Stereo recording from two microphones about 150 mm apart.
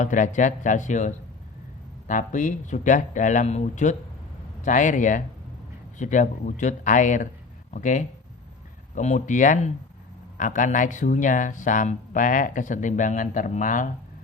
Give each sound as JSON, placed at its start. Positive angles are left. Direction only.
{"t": 0.0, "sound": "speech", "side_deg": 55}